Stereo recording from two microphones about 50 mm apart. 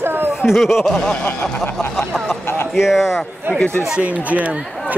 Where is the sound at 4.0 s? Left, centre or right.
Right.